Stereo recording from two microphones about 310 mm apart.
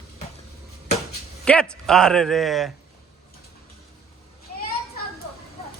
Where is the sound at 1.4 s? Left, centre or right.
Centre.